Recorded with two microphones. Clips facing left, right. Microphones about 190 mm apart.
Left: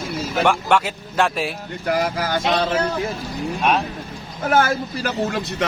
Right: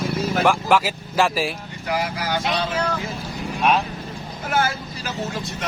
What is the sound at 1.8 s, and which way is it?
Speech, 45° left (ahead or behind).